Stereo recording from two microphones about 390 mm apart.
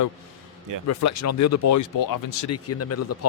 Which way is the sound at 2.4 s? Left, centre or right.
Left.